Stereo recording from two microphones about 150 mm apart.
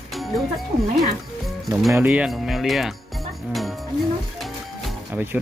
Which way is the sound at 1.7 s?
Centre (ahead or behind).